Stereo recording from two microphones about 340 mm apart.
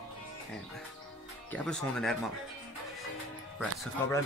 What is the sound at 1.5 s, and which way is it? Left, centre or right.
Speech, centre.